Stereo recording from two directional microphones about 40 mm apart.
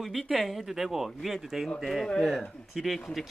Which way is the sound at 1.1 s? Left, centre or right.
Centre.